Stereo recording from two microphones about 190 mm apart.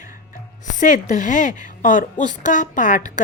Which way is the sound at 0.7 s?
40° left (ahead or behind).